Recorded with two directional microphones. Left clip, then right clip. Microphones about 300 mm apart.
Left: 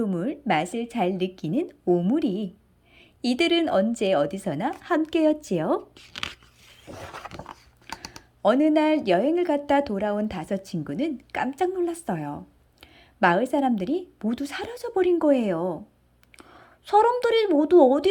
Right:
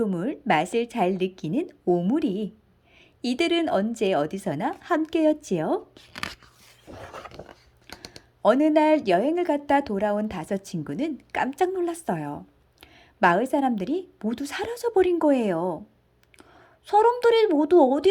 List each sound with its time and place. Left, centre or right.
0.0 s speech: centre
5.9 s speech: centre
8.0 s a woman's voice: centre